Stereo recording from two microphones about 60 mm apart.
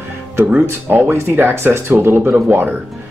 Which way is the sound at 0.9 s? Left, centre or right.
Right.